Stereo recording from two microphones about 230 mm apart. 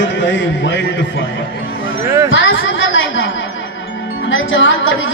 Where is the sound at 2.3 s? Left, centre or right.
Left.